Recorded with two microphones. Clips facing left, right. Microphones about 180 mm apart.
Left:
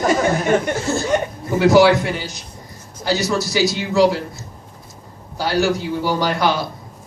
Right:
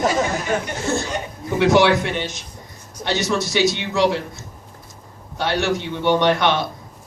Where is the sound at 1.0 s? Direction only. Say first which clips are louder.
Left 8 dB; 60° left (ahead or behind).